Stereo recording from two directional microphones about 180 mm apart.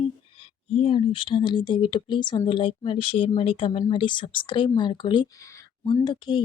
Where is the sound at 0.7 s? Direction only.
30° left (ahead or behind).